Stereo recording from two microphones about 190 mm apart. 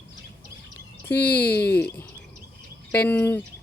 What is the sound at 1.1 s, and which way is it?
Speech, 10° left (ahead or behind).